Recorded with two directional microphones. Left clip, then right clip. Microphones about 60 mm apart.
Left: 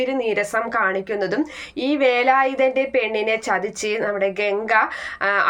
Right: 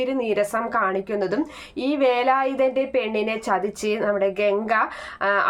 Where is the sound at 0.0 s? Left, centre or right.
Right.